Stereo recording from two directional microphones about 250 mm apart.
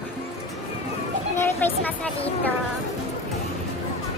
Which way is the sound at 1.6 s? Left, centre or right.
Centre.